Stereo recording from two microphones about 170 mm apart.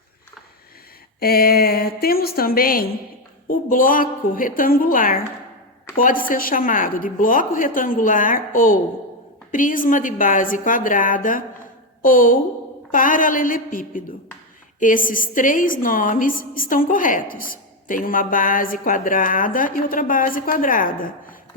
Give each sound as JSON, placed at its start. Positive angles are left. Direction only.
{"t": 1.2, "sound": "a woman's voice", "side_deg": 60}